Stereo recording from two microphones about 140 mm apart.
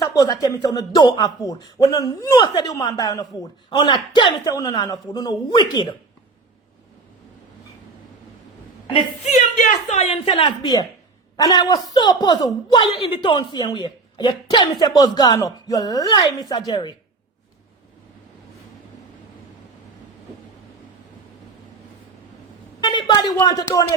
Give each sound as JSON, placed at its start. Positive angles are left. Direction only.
{"t": 0.0, "sound": "a man's voice", "side_deg": 25}
{"t": 8.9, "sound": "a woman's voice", "side_deg": 55}
{"t": 12.8, "sound": "a man's voice", "side_deg": 40}
{"t": 22.8, "sound": "a man's voice", "side_deg": 35}